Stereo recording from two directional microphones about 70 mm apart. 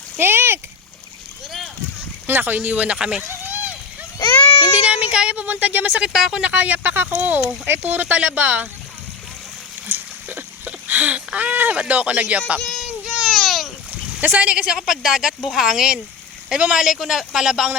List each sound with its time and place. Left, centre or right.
0.2 s speech: right
2.2 s speech: right; by 3.2 s centre
3.2 s a sound: right
4.8 s speech: centre
6.0 s speech: centre
6.4 s speech: right
9.8 s a sound: right
13.2 s a sound: centre
14.2 s speech: right